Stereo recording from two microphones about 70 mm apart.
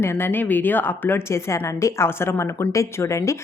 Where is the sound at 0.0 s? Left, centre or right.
Left.